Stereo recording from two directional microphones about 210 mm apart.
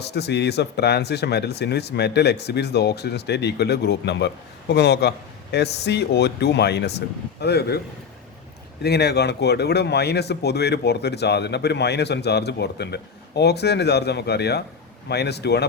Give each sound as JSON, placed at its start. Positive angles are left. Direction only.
{"t": 0.0, "sound": "speech", "side_deg": 50}
{"t": 8.8, "sound": "speech", "side_deg": 50}